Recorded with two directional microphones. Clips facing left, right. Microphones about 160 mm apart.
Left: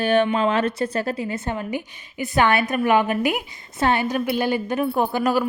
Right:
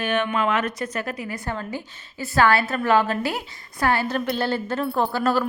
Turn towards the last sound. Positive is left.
turn(degrees=15)  # may be behind; listen again after turning